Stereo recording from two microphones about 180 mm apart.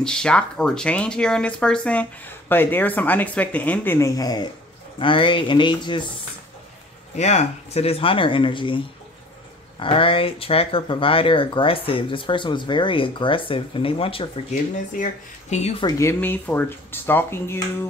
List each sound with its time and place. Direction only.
0.0 s speech: 5° left (ahead or behind); by 6.0 s 25° left (ahead or behind)
7.2 s speech: 40° left (ahead or behind)
15.8 s speech: 15° left (ahead or behind)